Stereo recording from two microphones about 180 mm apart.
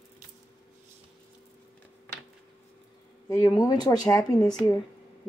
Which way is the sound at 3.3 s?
20° left (ahead or behind).